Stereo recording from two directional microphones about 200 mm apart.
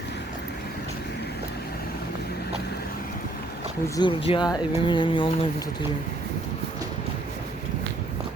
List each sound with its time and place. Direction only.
3.8 s speech: 20° left (ahead or behind)